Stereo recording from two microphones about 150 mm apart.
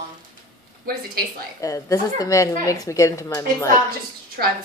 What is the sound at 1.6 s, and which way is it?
A woman's voice, 20° left (ahead or behind).